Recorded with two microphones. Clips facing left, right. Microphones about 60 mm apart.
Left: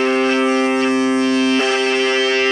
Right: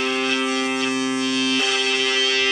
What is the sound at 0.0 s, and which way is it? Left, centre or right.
Music, left.